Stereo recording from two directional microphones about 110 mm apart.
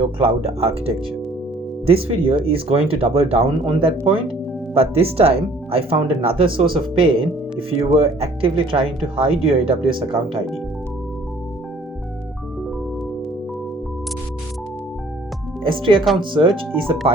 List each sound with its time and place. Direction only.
0.0 s speech: 55° right (ahead or behind)
15.6 s speech: 50° right (ahead or behind)